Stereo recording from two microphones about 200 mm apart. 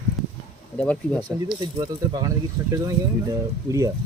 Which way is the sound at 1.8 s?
20° right (ahead or behind).